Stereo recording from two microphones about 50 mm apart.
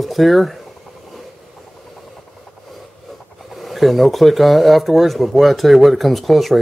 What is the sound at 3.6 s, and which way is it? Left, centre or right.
Speech, centre.